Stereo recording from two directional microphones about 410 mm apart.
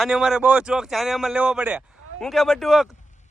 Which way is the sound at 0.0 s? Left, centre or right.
Centre.